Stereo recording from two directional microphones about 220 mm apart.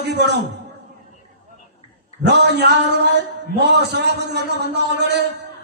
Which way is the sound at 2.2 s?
50° right (ahead or behind).